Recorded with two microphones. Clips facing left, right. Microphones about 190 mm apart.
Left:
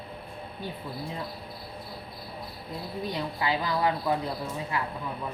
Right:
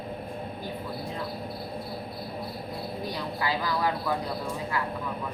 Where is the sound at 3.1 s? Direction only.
20° left (ahead or behind).